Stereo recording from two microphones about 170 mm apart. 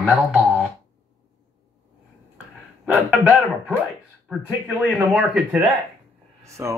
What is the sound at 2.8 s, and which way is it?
Speech, 5° right (ahead or behind).